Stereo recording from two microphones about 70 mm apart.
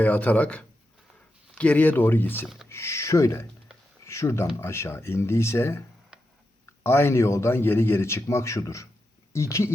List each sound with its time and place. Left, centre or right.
0.0 s speech: left
2.6 s a man's voice: left
6.1 s tick: centre
6.8 s a man's voice: left